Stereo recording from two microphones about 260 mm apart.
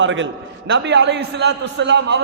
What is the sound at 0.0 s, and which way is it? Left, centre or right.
A man's voice, right.